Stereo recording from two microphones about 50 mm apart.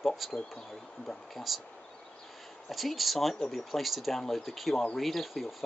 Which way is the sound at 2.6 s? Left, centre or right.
Centre.